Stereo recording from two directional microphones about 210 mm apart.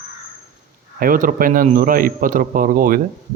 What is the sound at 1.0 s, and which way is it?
Speech, 40° right (ahead or behind).